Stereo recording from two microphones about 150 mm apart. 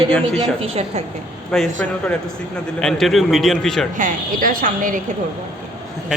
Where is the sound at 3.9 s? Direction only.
65° right (ahead or behind).